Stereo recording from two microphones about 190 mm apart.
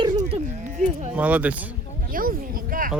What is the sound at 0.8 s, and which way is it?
Speech, 40° right (ahead or behind).